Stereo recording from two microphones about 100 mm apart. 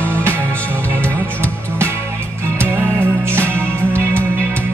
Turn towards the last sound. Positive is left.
turn(degrees=-25)  # may be behind; listen again after turning